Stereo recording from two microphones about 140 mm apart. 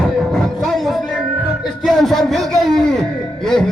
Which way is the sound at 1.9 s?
Centre (ahead or behind).